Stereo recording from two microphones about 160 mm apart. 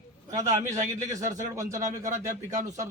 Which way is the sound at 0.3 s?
20° right (ahead or behind).